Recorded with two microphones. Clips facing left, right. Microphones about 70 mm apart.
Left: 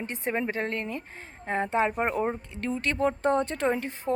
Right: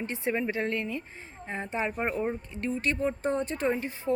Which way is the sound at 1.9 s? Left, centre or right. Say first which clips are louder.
Left 3 dB; left.